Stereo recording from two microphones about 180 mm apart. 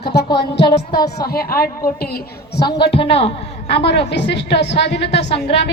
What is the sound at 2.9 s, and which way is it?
Speech, 30° left (ahead or behind).